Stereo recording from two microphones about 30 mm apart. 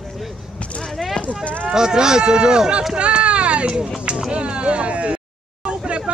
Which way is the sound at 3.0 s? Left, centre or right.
Right.